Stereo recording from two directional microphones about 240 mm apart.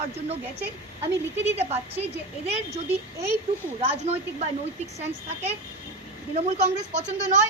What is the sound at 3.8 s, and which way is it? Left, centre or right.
Speech, right.